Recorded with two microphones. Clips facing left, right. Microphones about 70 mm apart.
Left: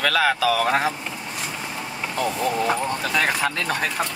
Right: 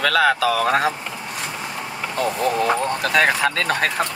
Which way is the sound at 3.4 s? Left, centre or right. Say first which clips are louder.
Right 4 dB; right.